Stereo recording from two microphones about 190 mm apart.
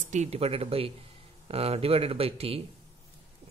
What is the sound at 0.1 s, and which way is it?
Speech, 35° right (ahead or behind).